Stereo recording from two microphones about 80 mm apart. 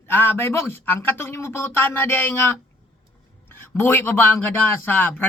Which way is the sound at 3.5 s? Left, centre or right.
Left.